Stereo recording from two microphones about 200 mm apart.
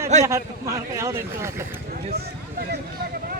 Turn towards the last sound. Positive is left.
turn(degrees=-50)  # may be behind; listen again after turning